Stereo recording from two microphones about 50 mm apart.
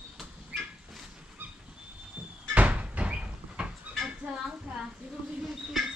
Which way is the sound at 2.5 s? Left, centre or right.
Right.